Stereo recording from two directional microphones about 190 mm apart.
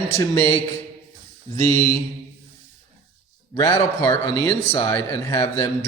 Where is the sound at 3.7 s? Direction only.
15° left (ahead or behind).